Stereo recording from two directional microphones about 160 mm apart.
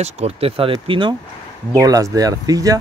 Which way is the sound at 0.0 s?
40° right (ahead or behind).